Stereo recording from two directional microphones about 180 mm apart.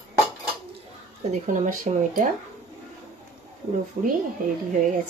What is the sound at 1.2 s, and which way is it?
Speech, 45° right (ahead or behind).